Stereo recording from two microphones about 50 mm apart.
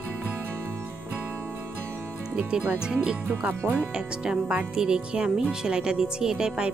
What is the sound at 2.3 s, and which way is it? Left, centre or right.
Speech, centre.